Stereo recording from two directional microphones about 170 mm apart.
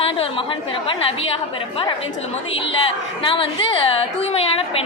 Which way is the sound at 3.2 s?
30° left (ahead or behind).